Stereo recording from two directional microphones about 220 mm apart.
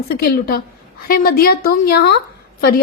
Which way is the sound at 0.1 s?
45° left (ahead or behind).